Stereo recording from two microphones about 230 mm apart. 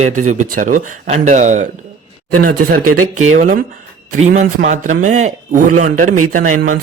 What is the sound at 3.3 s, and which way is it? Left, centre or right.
Speech, right.